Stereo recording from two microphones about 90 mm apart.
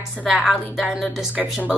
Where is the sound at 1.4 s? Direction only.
15° right (ahead or behind).